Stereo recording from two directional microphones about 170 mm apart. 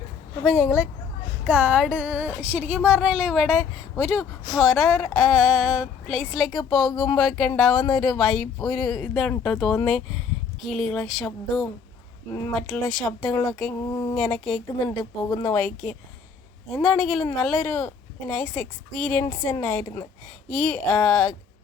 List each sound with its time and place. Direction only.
0.4 s speech: 5° right (ahead or behind)
13.8 s speech: 25° left (ahead or behind)
14.2 s speech: 5° left (ahead or behind)
14.8 s speech: 20° left (ahead or behind)
15.5 s speech: 5° left (ahead or behind)
19.2 s speech: 20° left (ahead or behind)
20.5 s speech: 5° left (ahead or behind)